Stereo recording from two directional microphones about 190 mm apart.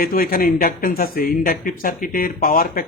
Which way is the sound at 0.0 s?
50° left (ahead or behind).